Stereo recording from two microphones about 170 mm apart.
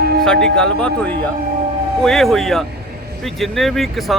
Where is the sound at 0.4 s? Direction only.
5° left (ahead or behind).